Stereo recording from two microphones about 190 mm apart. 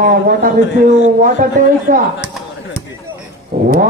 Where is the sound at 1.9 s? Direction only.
45° right (ahead or behind).